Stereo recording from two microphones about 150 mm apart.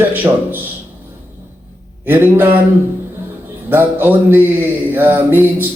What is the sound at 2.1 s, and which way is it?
Mantra, 15° right (ahead or behind).